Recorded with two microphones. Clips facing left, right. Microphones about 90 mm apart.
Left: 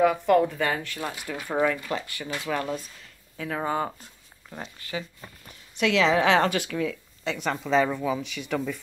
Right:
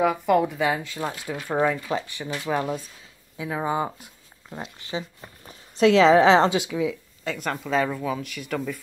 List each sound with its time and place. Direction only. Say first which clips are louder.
0.0 s speech: even; 5° right (ahead or behind)
1.3 s a woman's voice: right 1 dB; 5° right (ahead or behind)
1.6 s speech: right 1 dB; 15° right (ahead or behind)
5.5 s a woman's voice: right 7 dB; 35° right (ahead or behind); by 8.7 s centre (ahead or behind)